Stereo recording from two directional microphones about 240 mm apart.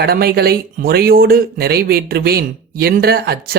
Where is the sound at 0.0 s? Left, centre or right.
Right.